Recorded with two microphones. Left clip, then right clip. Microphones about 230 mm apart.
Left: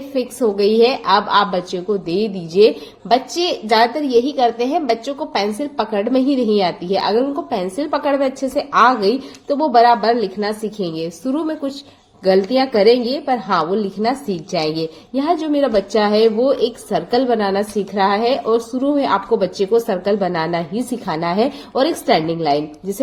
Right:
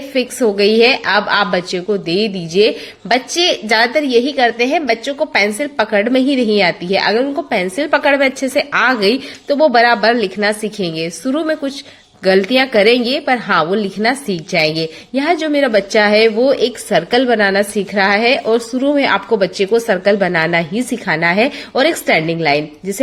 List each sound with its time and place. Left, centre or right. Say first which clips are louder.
0.1 s a woman's voice: right 3 dB; right